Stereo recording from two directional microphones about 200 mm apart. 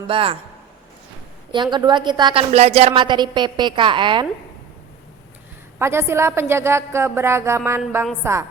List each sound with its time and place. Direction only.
0.1 s a woman's voice: 25° right (ahead or behind)
1.5 s a woman's voice: 20° right (ahead or behind)
5.8 s speech: 10° right (ahead or behind)